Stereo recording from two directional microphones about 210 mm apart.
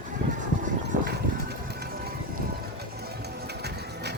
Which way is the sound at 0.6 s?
50° right (ahead or behind).